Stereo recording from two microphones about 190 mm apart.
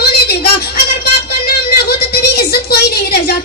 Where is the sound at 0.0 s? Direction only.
55° left (ahead or behind).